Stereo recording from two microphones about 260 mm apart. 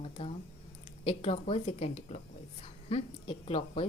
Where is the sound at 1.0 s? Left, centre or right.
Left.